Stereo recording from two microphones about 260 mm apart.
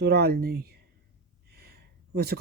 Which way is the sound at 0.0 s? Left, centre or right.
Right.